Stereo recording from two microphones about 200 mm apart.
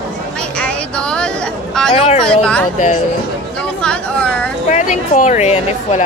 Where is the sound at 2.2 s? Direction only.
5° left (ahead or behind).